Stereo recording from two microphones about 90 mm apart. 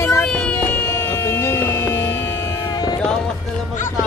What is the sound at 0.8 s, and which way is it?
Music, 40° left (ahead or behind).